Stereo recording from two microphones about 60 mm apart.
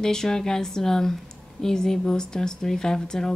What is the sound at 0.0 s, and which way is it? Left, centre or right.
Speech, centre.